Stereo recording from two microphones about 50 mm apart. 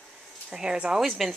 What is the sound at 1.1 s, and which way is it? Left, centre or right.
Speech, centre.